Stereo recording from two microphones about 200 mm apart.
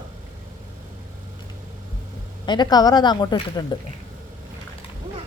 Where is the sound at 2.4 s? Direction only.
20° left (ahead or behind).